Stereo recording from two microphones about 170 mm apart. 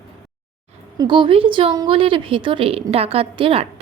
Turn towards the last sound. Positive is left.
turn(degrees=-35)  # may be behind; listen again after turning